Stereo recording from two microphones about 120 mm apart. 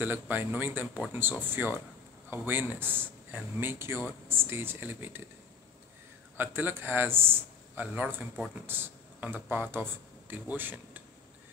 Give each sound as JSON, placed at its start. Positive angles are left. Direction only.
{"t": 0.0, "sound": "a man's voice", "side_deg": -15}
{"t": 6.3, "sound": "a man's voice", "side_deg": -15}